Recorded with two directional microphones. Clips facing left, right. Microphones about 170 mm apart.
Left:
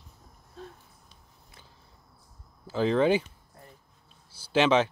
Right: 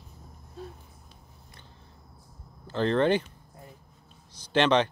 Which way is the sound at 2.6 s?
5° left (ahead or behind).